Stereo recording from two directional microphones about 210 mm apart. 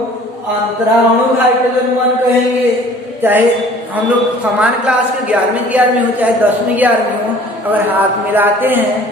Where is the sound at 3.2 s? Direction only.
10° right (ahead or behind).